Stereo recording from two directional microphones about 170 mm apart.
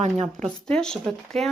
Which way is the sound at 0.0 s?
45° right (ahead or behind).